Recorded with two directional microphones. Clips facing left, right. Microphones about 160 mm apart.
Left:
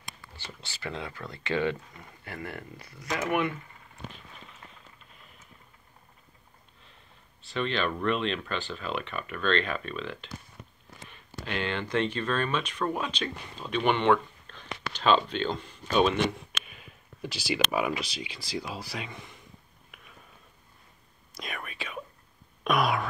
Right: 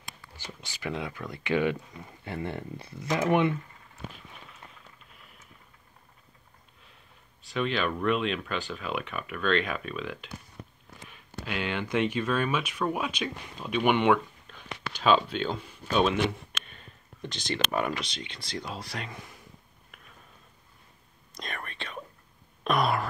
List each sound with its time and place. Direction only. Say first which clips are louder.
0.4 s speech: right 2 dB; 10° right (ahead or behind)
2.2 s speech: right 5 dB; 25° right (ahead or behind)
7.5 s speech: right 1 dB; 5° right (ahead or behind)
11.4 s speech: even; 10° right (ahead or behind)
21.4 s speech: even; 5° left (ahead or behind)
22.6 s a sound: even; centre (ahead or behind)